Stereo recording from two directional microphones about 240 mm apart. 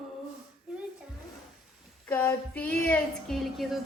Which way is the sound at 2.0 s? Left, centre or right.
Centre.